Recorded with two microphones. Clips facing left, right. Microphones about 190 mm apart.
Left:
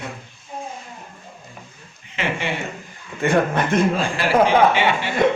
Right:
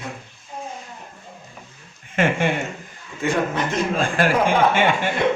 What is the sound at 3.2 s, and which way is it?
Speech, 60° left (ahead or behind).